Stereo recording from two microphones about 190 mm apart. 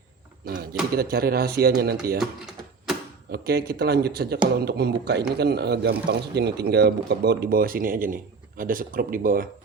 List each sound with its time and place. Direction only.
0.4 s speech: 55° right (ahead or behind)
3.3 s a man's voice: 55° right (ahead or behind)